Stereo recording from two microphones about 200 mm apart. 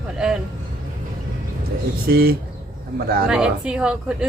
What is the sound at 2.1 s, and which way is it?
Speech, 50° right (ahead or behind).